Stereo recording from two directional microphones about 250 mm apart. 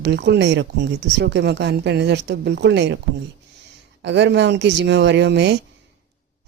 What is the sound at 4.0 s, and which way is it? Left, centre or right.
A woman's voice, right.